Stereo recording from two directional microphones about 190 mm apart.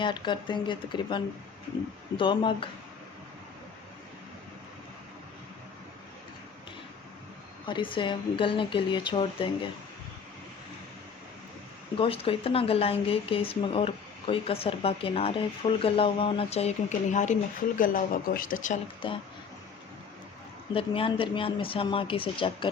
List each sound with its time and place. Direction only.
0.0 s speech: 25° left (ahead or behind)
7.7 s speech: 25° left (ahead or behind)
11.9 s speech: 30° left (ahead or behind)
19.0 s speech: 25° left (ahead or behind)
20.7 s speech: 30° left (ahead or behind)